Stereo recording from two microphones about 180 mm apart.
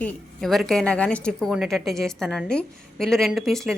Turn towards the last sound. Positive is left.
turn(degrees=0)  # may be behind; listen again after turning